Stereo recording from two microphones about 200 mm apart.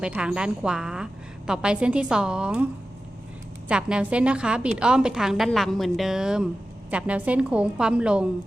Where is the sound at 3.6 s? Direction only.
5° right (ahead or behind).